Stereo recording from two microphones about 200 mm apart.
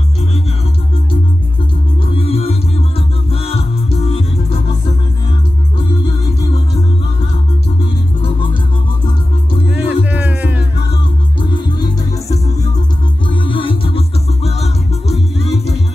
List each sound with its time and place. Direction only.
2.1 s music: 30° left (ahead or behind)
9.7 s music: 10° right (ahead or behind)
13.3 s music: 25° left (ahead or behind)